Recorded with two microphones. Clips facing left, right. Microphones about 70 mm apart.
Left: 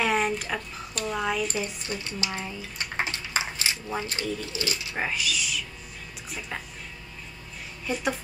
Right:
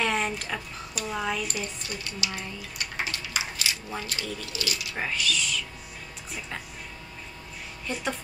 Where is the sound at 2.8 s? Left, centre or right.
Left.